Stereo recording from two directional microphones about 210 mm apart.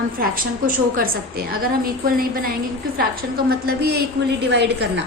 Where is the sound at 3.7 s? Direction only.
50° right (ahead or behind).